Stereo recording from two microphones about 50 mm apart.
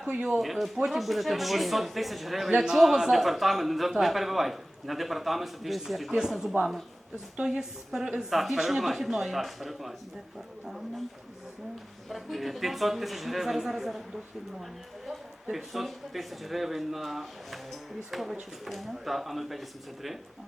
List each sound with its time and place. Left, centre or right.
0.0 s speech: right
0.3 s a man's voice: centre
12.0 s a man's voice: centre
15.4 s a man's voice: centre